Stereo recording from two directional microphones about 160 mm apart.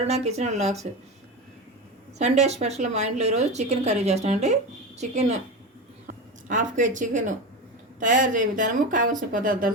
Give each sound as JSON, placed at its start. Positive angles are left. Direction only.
{"t": 0.1, "sound": "speech", "side_deg": -40}
{"t": 2.1, "sound": "speech", "side_deg": -45}
{"t": 6.1, "sound": "a woman's voice", "side_deg": -55}